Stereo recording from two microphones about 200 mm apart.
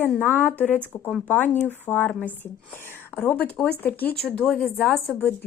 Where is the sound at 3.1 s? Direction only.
10° left (ahead or behind).